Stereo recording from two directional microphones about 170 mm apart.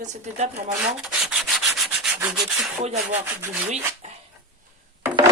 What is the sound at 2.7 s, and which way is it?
Speech, 40° right (ahead or behind).